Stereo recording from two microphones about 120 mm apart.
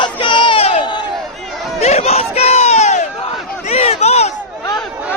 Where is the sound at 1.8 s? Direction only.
60° left (ahead or behind).